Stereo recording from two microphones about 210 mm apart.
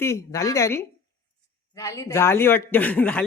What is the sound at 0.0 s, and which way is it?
A man's voice, 15° left (ahead or behind).